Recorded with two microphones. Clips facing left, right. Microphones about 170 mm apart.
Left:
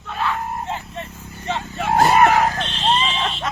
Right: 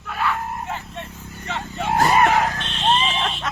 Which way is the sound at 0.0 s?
Centre (ahead or behind).